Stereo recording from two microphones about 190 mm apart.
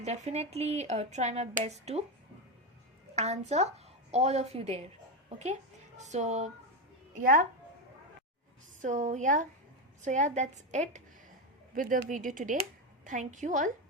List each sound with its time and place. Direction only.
0.0 s speech: 35° right (ahead or behind)
3.2 s a woman's voice: 35° right (ahead or behind)
6.0 s a woman's voice: 35° right (ahead or behind)
8.8 s speech: 40° right (ahead or behind)